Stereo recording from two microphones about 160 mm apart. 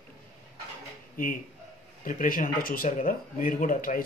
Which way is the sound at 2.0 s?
60° left (ahead or behind).